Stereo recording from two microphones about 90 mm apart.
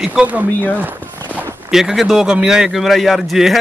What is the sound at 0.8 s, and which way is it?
Clip-clop, 20° right (ahead or behind).